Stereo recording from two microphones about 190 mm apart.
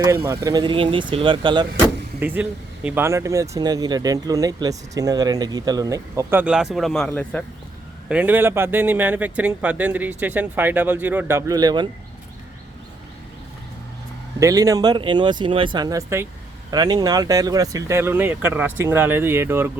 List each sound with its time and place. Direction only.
0.3 s speech: 20° right (ahead or behind)
2.1 s speech: 10° right (ahead or behind); by 7.4 s 5° left (ahead or behind)
8.1 s speech: 10° right (ahead or behind)
14.3 s speech: 15° right (ahead or behind)